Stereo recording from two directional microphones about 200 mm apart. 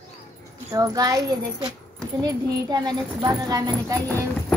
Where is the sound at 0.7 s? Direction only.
20° right (ahead or behind).